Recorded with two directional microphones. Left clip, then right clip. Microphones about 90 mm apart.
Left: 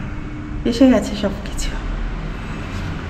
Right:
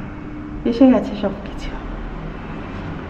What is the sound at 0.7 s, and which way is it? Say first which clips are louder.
Speech: even; 20° right (ahead or behind).